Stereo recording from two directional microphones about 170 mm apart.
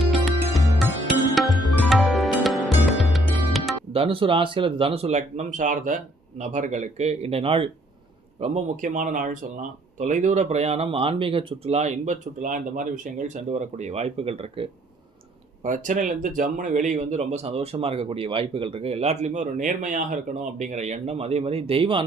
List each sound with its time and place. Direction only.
0.0 s music: centre (ahead or behind)
3.9 s speech: 35° right (ahead or behind)
15.6 s speech: 45° right (ahead or behind); by 22.0 s 30° right (ahead or behind)